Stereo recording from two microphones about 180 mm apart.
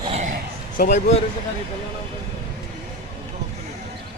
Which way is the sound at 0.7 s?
40° left (ahead or behind).